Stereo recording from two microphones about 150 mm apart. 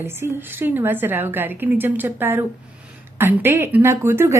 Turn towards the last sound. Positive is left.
turn(degrees=-15)  # may be behind; listen again after turning